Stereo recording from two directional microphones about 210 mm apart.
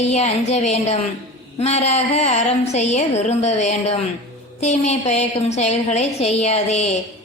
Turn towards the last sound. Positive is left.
turn(degrees=30)  # may be behind; listen again after turning